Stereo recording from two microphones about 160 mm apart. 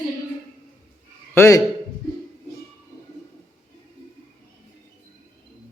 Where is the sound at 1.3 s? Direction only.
15° left (ahead or behind).